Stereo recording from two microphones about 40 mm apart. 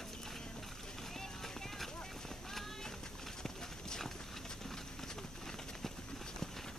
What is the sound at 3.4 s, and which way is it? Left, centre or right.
Clip-clop, centre.